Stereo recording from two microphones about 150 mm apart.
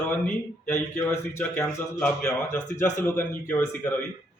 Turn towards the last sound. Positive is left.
turn(degrees=10)  # may be behind; listen again after turning